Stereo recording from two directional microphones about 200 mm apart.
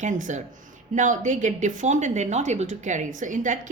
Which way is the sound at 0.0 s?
40° right (ahead or behind).